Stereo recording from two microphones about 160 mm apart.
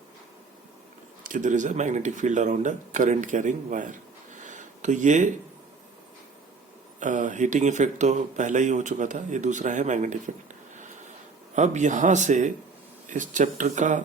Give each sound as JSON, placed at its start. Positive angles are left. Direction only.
{"t": 1.2, "sound": "speech", "side_deg": -55}
{"t": 7.0, "sound": "speech", "side_deg": -55}